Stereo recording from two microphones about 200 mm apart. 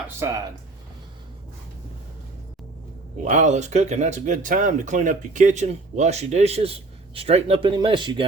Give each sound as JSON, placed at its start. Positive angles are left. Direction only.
{"t": 0.2, "sound": "speech", "side_deg": -15}
{"t": 3.2, "sound": "speech", "side_deg": -35}